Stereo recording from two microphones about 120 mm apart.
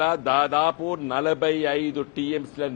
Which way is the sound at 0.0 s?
20° left (ahead or behind).